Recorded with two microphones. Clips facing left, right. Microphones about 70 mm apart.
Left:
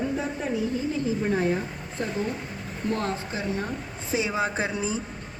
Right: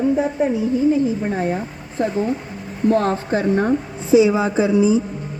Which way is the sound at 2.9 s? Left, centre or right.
Right.